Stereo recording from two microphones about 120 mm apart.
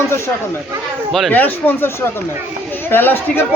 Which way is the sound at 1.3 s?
15° left (ahead or behind).